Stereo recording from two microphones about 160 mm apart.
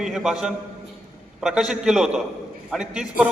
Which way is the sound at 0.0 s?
Centre (ahead or behind).